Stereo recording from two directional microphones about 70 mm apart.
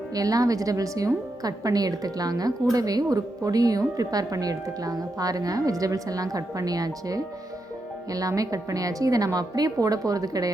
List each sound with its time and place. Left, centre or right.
0.1 s a woman's voice: right